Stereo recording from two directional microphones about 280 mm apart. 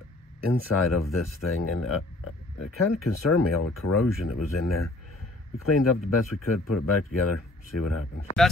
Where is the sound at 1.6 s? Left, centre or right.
Left.